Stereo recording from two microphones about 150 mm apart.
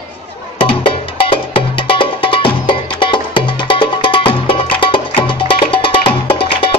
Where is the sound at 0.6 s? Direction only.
35° left (ahead or behind).